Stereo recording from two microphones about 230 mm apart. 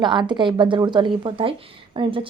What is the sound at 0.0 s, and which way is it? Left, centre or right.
A woman's voice, centre.